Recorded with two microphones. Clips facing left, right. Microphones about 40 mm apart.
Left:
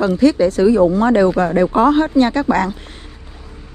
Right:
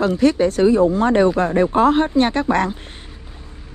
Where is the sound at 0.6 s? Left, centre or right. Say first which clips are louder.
Left 2 dB; left.